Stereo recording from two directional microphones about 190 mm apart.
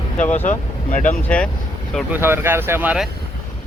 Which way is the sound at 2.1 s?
10° right (ahead or behind).